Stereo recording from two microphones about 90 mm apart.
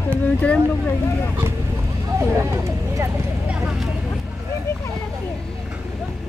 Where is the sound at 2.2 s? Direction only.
25° right (ahead or behind).